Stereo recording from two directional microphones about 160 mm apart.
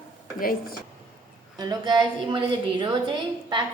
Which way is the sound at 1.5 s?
25° right (ahead or behind).